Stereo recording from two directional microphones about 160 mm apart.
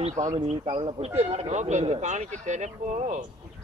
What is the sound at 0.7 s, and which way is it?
Speech, 35° right (ahead or behind).